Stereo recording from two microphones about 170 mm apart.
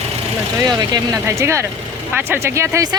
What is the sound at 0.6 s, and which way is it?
Speech, 25° right (ahead or behind).